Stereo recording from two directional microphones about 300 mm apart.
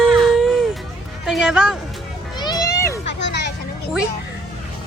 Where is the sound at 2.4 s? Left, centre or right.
Centre.